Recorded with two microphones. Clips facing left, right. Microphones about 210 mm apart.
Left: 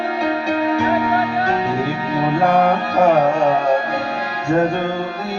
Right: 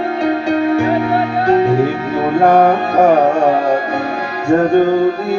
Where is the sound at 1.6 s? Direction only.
50° right (ahead or behind).